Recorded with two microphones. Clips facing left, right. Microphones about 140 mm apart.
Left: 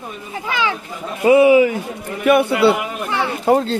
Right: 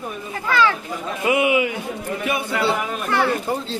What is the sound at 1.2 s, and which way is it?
Speech, 35° left (ahead or behind).